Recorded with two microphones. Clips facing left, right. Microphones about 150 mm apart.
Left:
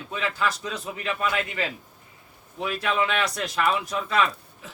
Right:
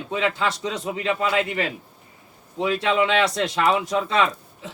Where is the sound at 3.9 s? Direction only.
25° right (ahead or behind).